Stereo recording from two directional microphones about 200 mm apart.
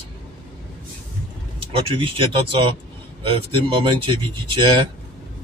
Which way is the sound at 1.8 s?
25° right (ahead or behind).